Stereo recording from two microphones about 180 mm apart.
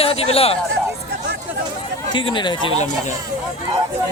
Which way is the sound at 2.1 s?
25° left (ahead or behind).